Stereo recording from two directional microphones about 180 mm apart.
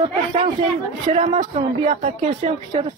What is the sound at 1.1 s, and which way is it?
A woman's voice, 40° right (ahead or behind).